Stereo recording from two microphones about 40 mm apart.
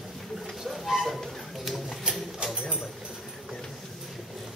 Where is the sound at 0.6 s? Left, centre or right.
Centre.